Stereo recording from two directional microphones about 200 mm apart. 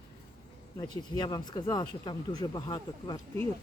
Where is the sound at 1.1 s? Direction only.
20° left (ahead or behind).